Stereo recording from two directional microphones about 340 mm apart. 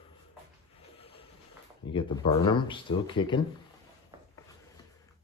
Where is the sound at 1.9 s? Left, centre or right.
Centre.